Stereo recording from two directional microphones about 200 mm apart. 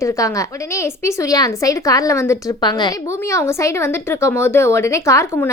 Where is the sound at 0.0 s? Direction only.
15° left (ahead or behind).